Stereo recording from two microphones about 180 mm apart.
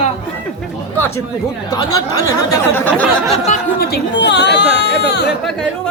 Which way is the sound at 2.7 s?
10° left (ahead or behind).